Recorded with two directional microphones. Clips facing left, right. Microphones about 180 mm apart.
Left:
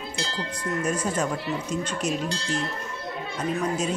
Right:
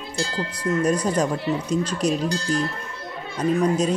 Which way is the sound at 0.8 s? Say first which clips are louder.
Right 4 dB; 35° right (ahead or behind).